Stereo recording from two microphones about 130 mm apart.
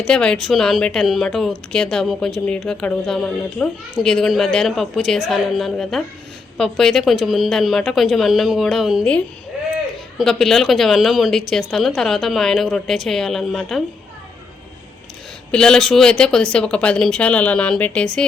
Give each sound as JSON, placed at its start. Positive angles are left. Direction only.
{"t": 0.0, "sound": "a woman's voice", "side_deg": 5}
{"t": 10.2, "sound": "a woman's voice", "side_deg": 5}
{"t": 15.5, "sound": "speech", "side_deg": 5}